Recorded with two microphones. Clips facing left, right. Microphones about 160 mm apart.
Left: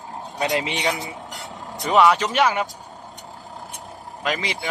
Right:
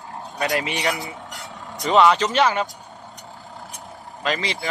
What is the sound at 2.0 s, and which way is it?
Speech, centre (ahead or behind).